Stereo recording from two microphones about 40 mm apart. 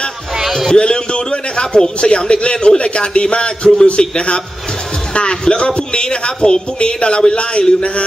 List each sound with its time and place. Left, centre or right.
0.7 s a man's voice: left